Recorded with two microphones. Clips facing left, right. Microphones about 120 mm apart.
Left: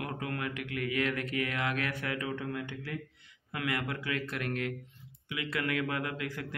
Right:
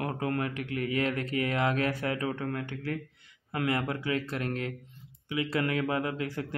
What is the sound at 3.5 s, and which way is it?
Speech, 35° right (ahead or behind).